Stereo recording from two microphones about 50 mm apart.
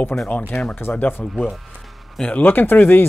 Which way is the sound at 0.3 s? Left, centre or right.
Left.